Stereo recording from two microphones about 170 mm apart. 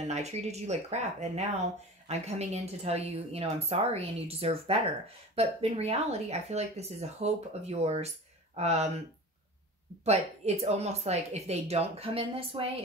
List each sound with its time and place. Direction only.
0.0 s speech: 40° right (ahead or behind)
10.0 s speech: 40° right (ahead or behind)